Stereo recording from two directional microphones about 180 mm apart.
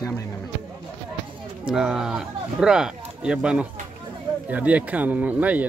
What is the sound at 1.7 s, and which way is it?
Speech, 5° right (ahead or behind).